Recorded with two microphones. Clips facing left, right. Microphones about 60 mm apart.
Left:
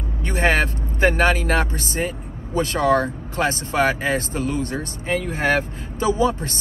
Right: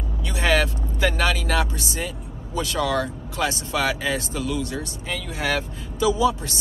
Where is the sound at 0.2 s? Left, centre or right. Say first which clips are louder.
Left 2 dB; left.